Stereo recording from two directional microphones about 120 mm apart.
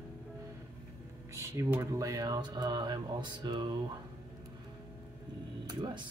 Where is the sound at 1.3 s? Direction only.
25° right (ahead or behind).